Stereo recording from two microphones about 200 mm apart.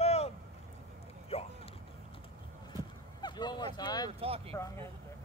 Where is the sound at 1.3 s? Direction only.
30° left (ahead or behind).